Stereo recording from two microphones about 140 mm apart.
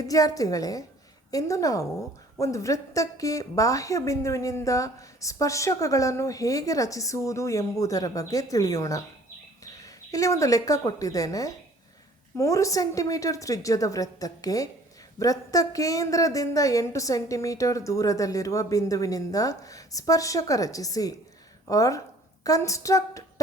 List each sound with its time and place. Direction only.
0.0 s a woman's voice: 25° left (ahead or behind)